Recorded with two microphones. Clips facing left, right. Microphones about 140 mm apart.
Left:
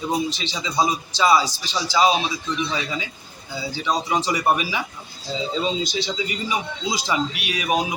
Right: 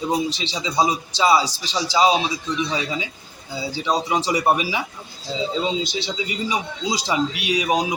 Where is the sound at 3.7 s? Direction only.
25° right (ahead or behind).